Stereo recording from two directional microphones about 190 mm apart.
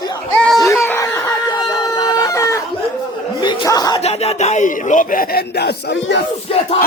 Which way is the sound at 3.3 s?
20° left (ahead or behind).